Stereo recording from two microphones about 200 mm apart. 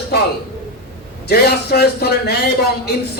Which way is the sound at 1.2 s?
55° left (ahead or behind).